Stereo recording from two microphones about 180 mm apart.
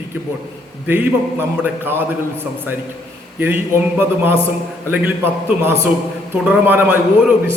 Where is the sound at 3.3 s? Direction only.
10° right (ahead or behind).